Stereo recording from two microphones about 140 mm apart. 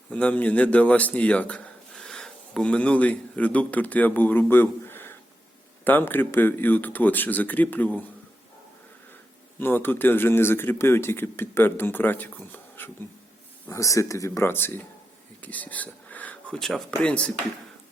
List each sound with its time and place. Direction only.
0.1 s speech: 10° left (ahead or behind)
9.6 s speech: 15° left (ahead or behind)
15.4 s a sound: 10° left (ahead or behind)
17.0 s speech: 5° left (ahead or behind)